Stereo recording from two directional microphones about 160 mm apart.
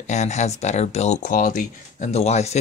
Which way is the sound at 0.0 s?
45° left (ahead or behind).